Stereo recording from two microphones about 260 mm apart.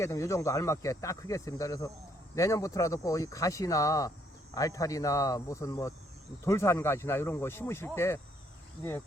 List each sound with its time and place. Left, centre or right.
0.0 s speech: centre